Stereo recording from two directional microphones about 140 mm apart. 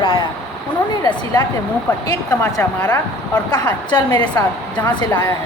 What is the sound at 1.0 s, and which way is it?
A woman's voice, 30° left (ahead or behind).